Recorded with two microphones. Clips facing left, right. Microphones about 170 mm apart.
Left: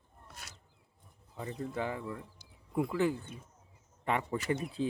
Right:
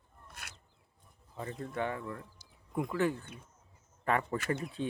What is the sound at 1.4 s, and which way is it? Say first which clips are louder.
Speech: left 1 dB; 15° left (ahead or behind).